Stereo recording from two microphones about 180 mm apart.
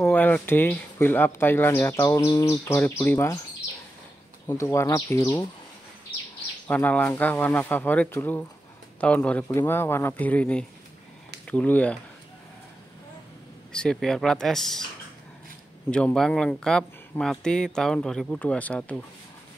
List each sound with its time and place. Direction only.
0.0 s speech: 10° left (ahead or behind)
4.5 s speech: 15° left (ahead or behind)
6.7 s speech: 10° left (ahead or behind)
13.7 s speech: 5° left (ahead or behind)
15.9 s speech: 5° left (ahead or behind)